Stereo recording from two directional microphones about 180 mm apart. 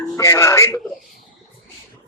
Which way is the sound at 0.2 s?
15° left (ahead or behind).